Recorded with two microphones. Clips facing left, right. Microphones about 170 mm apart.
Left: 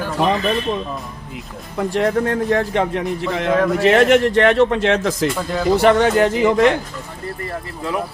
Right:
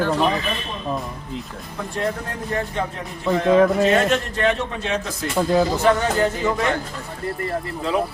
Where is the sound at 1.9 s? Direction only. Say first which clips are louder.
Left 8 dB; 90° left.